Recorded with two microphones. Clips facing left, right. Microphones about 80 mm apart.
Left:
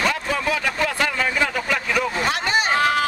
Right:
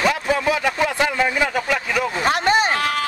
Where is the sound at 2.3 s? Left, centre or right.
Right.